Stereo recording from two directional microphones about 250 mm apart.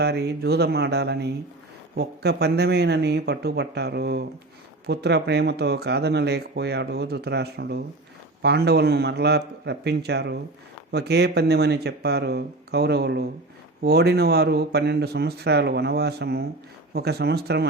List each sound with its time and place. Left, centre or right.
0.0 s speech: right